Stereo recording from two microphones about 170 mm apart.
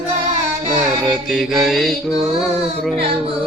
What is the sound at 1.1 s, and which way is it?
Mantra, centre (ahead or behind).